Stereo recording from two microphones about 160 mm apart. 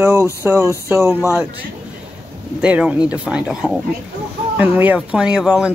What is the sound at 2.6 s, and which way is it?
Speech, 10° right (ahead or behind).